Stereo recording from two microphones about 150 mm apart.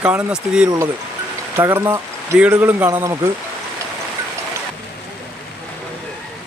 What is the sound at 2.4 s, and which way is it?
Speech, 10° right (ahead or behind).